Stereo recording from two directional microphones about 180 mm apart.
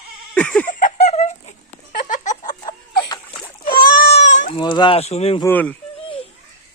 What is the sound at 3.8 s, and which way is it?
Goat, 50° left (ahead or behind).